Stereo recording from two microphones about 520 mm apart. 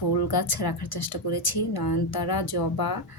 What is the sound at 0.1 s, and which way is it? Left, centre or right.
Speech, left.